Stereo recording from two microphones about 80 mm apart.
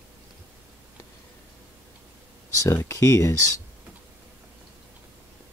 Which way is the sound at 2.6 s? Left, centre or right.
Left.